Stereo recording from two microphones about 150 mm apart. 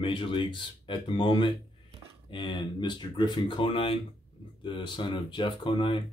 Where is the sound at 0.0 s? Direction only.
35° left (ahead or behind).